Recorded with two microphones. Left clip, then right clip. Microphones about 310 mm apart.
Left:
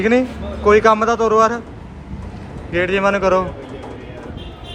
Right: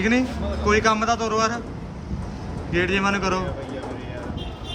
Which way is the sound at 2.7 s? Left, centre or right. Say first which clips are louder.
Left 6 dB; centre.